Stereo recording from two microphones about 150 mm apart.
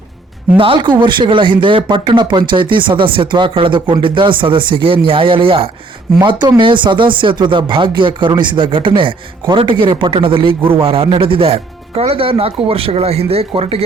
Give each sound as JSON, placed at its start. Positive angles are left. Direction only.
{"t": 0.5, "sound": "speech", "side_deg": -35}
{"t": 6.1, "sound": "speech", "side_deg": -25}